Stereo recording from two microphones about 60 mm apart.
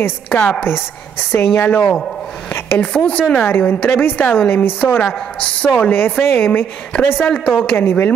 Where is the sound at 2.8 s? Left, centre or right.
Left.